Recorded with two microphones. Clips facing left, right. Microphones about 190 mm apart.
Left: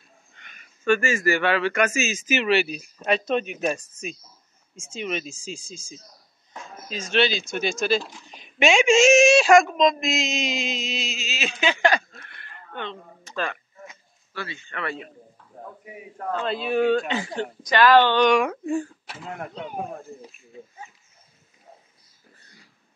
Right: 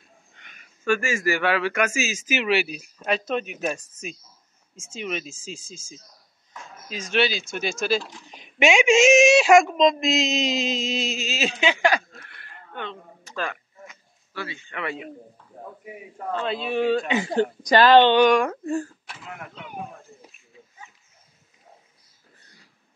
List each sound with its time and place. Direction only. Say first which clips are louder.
0.4 s speech: left 2 dB; 10° right (ahead or behind)
6.9 s speech: left 1 dB; 10° right (ahead or behind)
8.3 s a woman's voice: even; 15° right (ahead or behind); by 11.5 s 40° right (ahead or behind)
11.5 s a sound: left 1 dB; 15° right (ahead or behind)
14.3 s speech: right 1 dB; 10° right (ahead or behind)
16.2 s speech: even; centre (ahead or behind)
17.4 s speech: right 4 dB; 40° right (ahead or behind)
17.8 s a woman's voice: right 2 dB; 20° right (ahead or behind)
18.2 s speech: right 1 dB; centre (ahead or behind)
19.0 s speech: left 5 dB; 35° left (ahead or behind)